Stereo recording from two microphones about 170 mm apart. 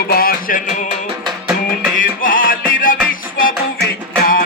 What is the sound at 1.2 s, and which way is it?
Music, 5° right (ahead or behind).